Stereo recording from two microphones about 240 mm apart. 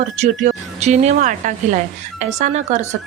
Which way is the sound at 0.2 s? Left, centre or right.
Right.